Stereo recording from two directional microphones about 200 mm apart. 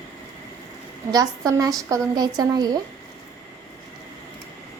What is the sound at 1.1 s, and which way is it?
A woman's voice, 20° right (ahead or behind).